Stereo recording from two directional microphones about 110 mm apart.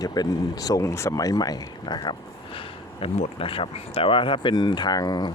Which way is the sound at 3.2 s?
55° left (ahead or behind).